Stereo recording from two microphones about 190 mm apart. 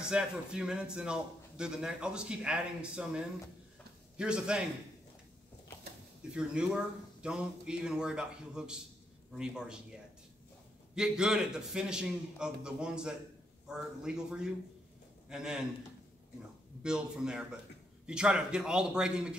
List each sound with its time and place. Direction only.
0.0 s a man's voice: 5° right (ahead or behind)
6.3 s a man's voice: 5° right (ahead or behind)
11.0 s a man's voice: 5° right (ahead or behind)
16.8 s a man's voice: 5° right (ahead or behind)